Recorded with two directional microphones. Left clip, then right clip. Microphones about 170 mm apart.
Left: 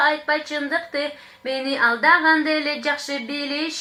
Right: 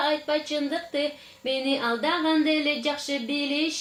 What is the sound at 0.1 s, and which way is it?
A woman's voice, centre (ahead or behind).